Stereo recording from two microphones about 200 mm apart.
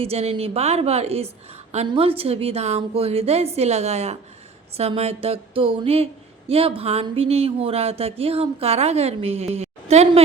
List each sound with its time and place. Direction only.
0.0 s speech: 30° right (ahead or behind)
4.8 s a sound: 30° right (ahead or behind)
6.5 s a woman's voice: 30° right (ahead or behind)